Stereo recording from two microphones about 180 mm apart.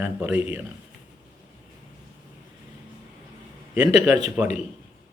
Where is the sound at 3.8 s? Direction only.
Centre (ahead or behind).